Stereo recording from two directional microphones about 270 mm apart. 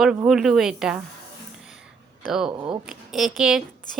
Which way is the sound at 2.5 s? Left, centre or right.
Centre.